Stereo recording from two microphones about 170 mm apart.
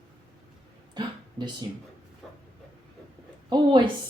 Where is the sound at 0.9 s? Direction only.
25° right (ahead or behind).